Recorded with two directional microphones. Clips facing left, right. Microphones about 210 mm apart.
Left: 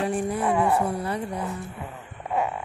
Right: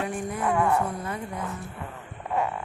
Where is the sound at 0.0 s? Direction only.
35° left (ahead or behind).